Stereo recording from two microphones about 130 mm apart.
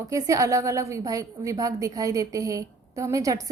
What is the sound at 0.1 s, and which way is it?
A woman's voice, 25° right (ahead or behind).